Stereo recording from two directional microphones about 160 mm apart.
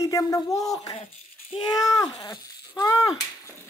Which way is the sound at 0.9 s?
35° left (ahead or behind).